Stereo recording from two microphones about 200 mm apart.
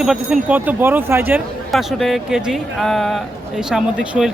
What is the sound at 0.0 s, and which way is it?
Speech, 5° right (ahead or behind).